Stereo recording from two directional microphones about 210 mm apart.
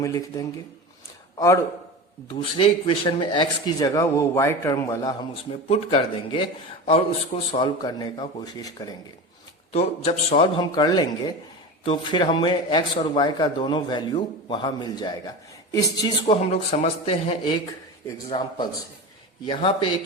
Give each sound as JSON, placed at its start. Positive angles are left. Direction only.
{"t": 0.0, "sound": "speech", "side_deg": 15}
{"t": 2.4, "sound": "speech", "side_deg": 25}
{"t": 5.6, "sound": "speech", "side_deg": 30}
{"t": 9.7, "sound": "speech", "side_deg": 30}